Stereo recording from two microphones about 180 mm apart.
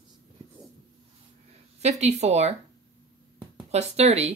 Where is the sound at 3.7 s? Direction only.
35° right (ahead or behind).